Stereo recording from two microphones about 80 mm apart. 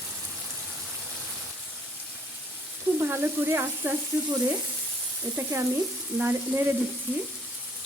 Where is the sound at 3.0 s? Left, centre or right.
Right.